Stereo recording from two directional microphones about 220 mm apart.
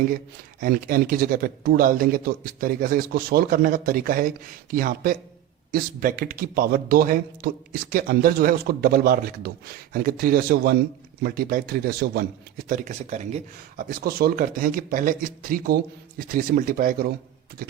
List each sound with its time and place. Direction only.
0.6 s a man's voice: 40° right (ahead or behind)